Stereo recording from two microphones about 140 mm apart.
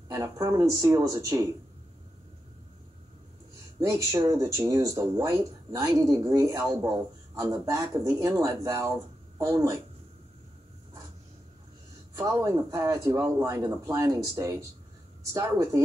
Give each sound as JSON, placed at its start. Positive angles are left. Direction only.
{"t": 0.1, "sound": "speech", "side_deg": -20}
{"t": 3.8, "sound": "speech", "side_deg": -20}
{"t": 12.2, "sound": "speech", "side_deg": -20}